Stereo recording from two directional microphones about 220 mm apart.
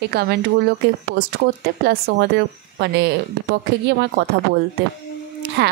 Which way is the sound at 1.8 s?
50° right (ahead or behind).